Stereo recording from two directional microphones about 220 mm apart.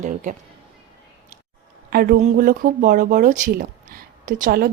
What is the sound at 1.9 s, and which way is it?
Speech, 45° right (ahead or behind).